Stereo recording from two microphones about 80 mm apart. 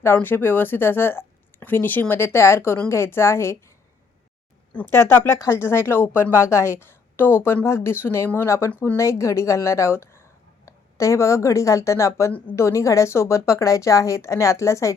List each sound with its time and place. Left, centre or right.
0.0 s a woman's voice: left
4.9 s a woman's voice: left